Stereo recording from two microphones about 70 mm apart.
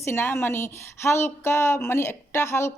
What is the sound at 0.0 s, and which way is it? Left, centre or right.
A woman's voice, left.